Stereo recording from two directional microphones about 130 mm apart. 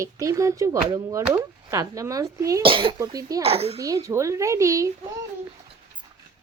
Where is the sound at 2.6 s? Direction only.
40° right (ahead or behind).